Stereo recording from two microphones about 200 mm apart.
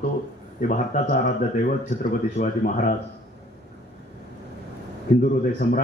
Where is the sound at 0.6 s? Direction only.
45° left (ahead or behind).